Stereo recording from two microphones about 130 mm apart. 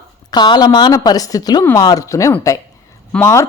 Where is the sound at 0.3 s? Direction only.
35° left (ahead or behind).